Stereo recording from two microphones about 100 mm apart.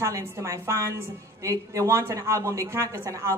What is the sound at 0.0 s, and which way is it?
A woman's voice, 30° right (ahead or behind).